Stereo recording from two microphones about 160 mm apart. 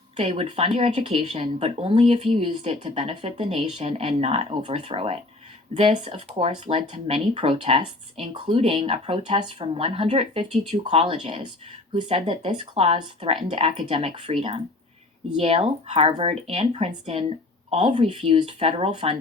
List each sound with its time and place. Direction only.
0.2 s speech: 35° right (ahead or behind)